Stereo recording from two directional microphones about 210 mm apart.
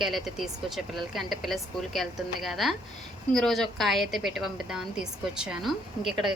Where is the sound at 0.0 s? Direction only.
Centre (ahead or behind).